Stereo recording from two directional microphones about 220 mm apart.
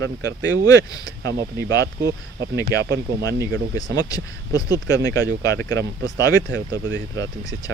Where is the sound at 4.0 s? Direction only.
15° left (ahead or behind).